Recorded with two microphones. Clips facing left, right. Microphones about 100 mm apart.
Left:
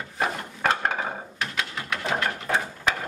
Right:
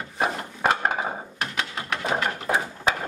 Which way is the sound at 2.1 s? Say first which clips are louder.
Right 1 dB; 10° right (ahead or behind).